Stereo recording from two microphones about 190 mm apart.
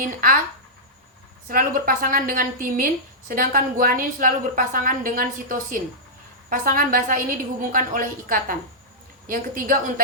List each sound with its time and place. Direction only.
0.0 s a woman's voice: 45° right (ahead or behind)
1.5 s a woman's voice: 45° right (ahead or behind)